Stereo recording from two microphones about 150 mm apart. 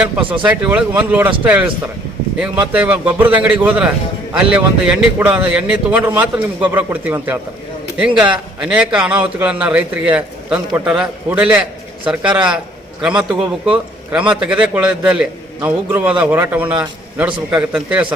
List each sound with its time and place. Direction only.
0.4 s a man's voice: 10° right (ahead or behind)
13.0 s a man's voice: 5° right (ahead or behind)
17.2 s a man's voice: 35° right (ahead or behind)
17.7 s a man's voice: 5° right (ahead or behind)